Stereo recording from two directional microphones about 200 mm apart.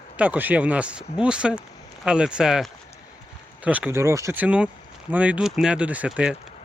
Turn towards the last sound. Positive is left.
turn(degrees=-5)  # may be behind; listen again after turning